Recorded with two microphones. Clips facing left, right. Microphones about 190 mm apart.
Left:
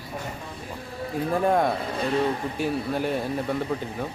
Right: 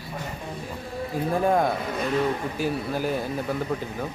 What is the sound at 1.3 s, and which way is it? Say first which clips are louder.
Speech: even; centre (ahead or behind).